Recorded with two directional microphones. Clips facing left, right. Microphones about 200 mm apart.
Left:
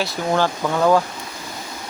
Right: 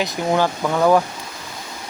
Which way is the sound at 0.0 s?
15° right (ahead or behind).